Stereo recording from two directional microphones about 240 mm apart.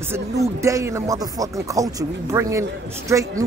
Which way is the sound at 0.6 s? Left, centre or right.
Centre.